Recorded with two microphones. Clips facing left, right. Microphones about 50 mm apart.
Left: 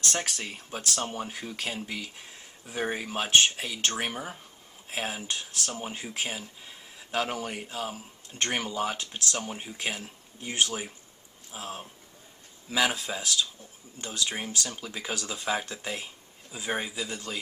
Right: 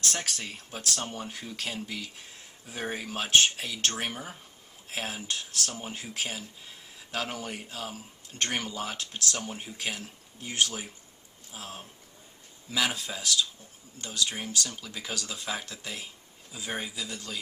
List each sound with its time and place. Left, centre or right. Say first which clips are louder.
0.2 s speech: left 2 dB; centre
16.9 s a man's voice: left 3 dB; left